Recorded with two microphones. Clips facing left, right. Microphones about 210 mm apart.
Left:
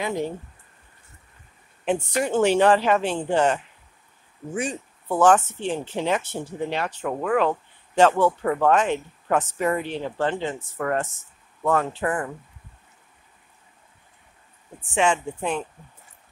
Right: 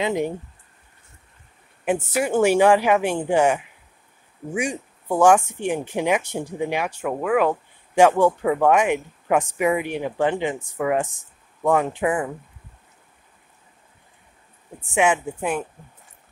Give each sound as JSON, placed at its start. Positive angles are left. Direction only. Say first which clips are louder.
{"t": 0.0, "sound": "speech", "louder": "right 4 dB", "side_deg": -20}
{"t": 1.9, "sound": "speech", "louder": "right 1 dB", "side_deg": -5}
{"t": 15.0, "sound": "speech", "louder": "right 2 dB", "side_deg": -5}